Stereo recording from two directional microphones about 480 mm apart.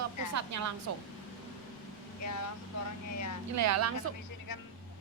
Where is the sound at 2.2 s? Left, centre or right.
Left.